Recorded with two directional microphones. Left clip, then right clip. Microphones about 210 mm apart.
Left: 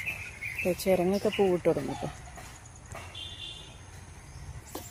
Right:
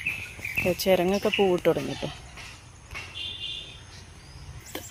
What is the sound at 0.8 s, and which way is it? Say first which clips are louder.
Speech: right 3 dB; centre (ahead or behind).